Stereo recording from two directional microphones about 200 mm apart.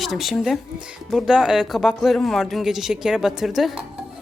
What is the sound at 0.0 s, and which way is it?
A woman's voice, centre (ahead or behind).